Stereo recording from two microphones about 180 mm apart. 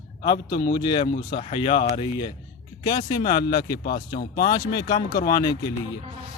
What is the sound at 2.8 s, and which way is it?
Speech, 20° left (ahead or behind).